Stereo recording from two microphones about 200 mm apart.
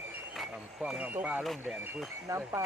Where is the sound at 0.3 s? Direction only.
Centre (ahead or behind).